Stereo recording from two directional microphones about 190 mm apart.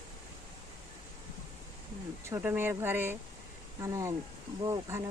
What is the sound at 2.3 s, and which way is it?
Speech, 10° right (ahead or behind).